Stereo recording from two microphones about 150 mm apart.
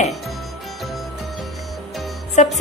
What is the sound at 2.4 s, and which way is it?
Speech, 50° left (ahead or behind).